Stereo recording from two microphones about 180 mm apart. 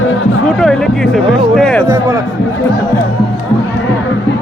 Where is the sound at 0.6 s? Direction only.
5° left (ahead or behind).